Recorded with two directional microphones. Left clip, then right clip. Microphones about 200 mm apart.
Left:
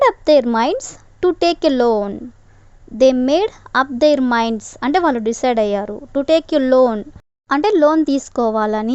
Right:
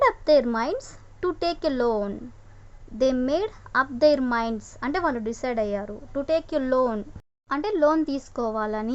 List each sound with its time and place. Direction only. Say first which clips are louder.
0.0 s a woman's voice: left 7 dB; 35° left (ahead or behind)